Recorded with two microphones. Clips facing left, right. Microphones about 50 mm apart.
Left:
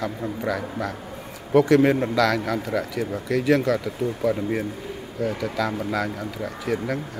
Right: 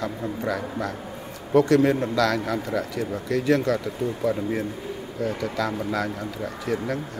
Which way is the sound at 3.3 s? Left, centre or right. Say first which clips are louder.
Left 1 dB; left.